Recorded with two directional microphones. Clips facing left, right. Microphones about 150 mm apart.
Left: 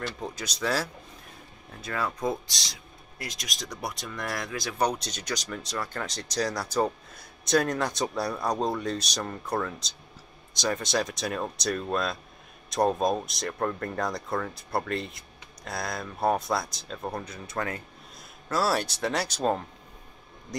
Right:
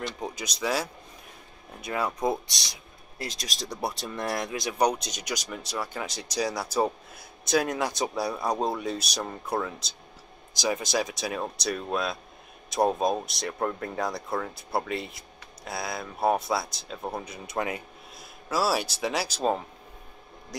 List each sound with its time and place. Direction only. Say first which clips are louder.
0.2 s speech: even; 10° right (ahead or behind)